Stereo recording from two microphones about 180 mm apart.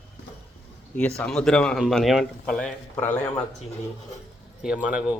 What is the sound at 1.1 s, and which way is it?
Speech, 5° left (ahead or behind).